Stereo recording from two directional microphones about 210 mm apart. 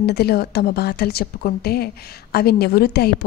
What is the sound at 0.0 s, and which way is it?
A woman's voice, 50° left (ahead or behind).